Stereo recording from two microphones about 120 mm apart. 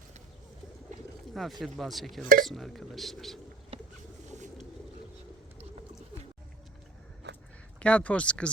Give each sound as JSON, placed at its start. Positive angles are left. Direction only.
{"t": 1.3, "sound": "speech", "side_deg": 0}
{"t": 4.3, "sound": "a sound", "side_deg": -90}
{"t": 7.8, "sound": "speech", "side_deg": 10}